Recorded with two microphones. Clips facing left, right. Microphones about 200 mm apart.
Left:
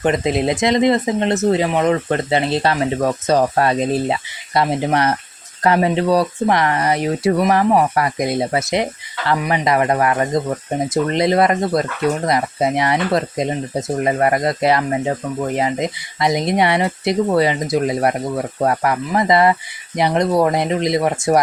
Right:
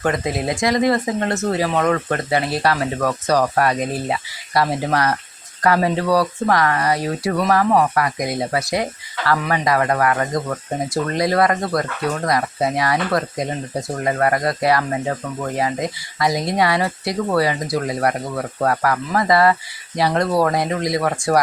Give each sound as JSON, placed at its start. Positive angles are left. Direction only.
{"t": 0.0, "sound": "speech", "side_deg": 20}